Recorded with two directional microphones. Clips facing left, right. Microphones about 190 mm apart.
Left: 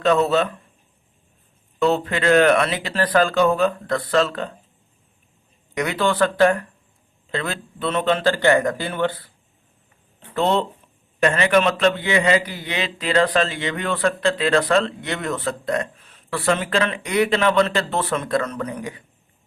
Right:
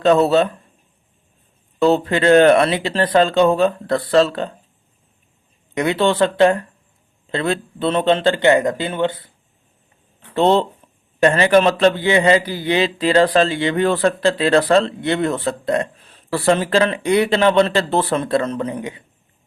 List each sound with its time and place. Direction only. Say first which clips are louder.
0.0 s a man's voice: right 4 dB; 35° right (ahead or behind)
1.8 s speech: right 4 dB; 30° right (ahead or behind)
5.7 s speech: right 4 dB; 30° right (ahead or behind)
10.3 s a man's voice: right 5 dB; 30° right (ahead or behind)